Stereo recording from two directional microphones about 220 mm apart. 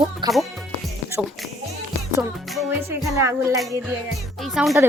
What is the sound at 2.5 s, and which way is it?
Speech, 10° right (ahead or behind).